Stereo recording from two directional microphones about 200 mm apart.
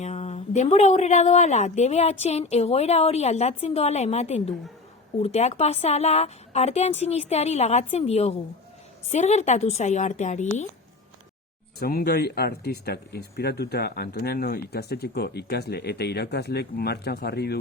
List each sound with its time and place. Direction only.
0.0 s a woman's voice: 35° left (ahead or behind)
11.8 s speech: 50° left (ahead or behind)